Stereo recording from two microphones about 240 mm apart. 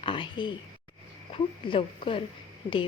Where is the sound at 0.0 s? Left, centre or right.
Left.